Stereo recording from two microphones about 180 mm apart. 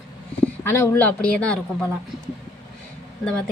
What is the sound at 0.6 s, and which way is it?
Speech, 10° left (ahead or behind).